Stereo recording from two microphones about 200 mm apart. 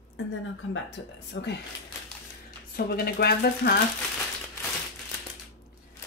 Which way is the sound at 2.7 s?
50° left (ahead or behind).